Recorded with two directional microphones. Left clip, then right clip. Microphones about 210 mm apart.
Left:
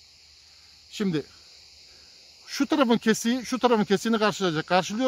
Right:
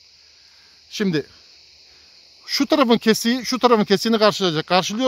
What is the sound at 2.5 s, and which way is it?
Speech, 45° right (ahead or behind).